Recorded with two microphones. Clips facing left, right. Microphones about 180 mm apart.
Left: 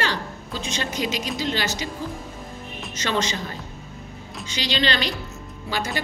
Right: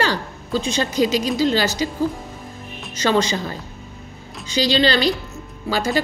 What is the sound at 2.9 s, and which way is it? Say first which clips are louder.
Speech: right 7 dB; 35° right (ahead or behind).